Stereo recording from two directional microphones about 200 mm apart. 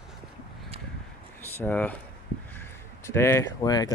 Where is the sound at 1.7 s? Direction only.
10° left (ahead or behind).